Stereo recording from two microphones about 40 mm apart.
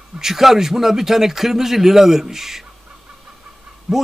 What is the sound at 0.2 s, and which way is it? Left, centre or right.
A man's voice, centre.